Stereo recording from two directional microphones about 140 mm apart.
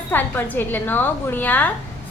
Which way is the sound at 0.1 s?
15° left (ahead or behind).